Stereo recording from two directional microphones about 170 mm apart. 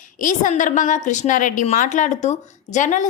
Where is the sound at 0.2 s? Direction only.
50° left (ahead or behind).